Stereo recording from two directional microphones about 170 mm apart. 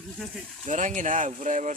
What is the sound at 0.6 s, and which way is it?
Speech, 45° right (ahead or behind).